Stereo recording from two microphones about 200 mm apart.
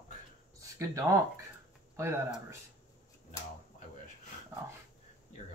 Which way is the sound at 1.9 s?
15° right (ahead or behind).